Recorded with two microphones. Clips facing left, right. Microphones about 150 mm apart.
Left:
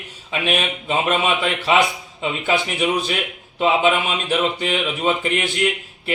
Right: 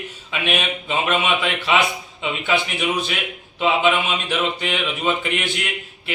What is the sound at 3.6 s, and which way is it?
Speech, 40° left (ahead or behind).